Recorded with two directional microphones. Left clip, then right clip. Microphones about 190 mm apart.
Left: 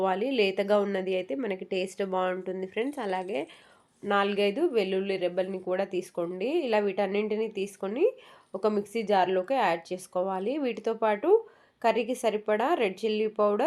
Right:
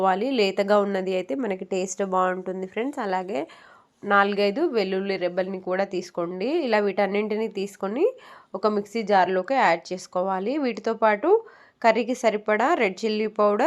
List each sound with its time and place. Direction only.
0.0 s a woman's voice: 15° right (ahead or behind)